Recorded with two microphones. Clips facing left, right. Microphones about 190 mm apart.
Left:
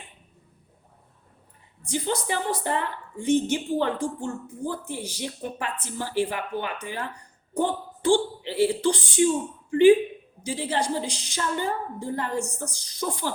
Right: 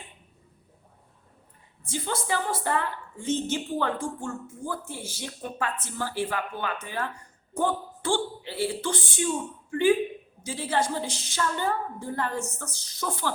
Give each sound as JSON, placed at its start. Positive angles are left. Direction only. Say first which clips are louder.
{"t": 1.8, "sound": "a woman's voice", "louder": "left 4 dB", "side_deg": 20}